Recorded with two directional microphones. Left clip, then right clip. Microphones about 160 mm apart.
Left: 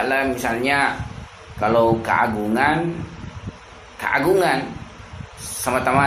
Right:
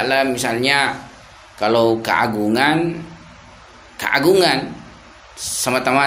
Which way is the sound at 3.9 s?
55° right (ahead or behind).